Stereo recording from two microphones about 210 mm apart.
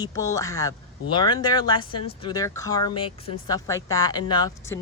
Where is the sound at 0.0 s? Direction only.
15° left (ahead or behind).